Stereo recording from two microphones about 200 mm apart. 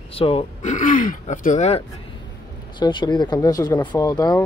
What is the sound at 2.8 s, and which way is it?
Speech, 25° left (ahead or behind).